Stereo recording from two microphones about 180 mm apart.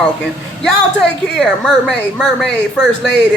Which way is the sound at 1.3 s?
5° left (ahead or behind).